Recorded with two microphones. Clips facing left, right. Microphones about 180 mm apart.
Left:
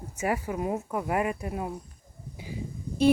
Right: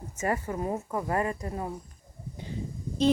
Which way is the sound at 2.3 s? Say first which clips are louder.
Even; 5° left (ahead or behind).